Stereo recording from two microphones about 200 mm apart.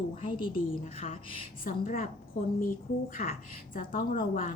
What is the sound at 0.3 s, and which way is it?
A woman's voice, 25° left (ahead or behind).